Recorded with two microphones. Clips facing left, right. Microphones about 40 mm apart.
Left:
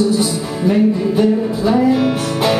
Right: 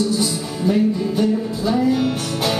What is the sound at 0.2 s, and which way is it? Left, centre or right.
Music, centre.